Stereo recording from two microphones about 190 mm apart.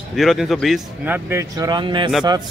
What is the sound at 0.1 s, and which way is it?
A man's voice, centre (ahead or behind).